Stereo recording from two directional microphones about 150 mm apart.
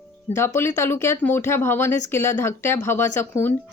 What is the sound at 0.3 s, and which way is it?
Speech, 15° left (ahead or behind).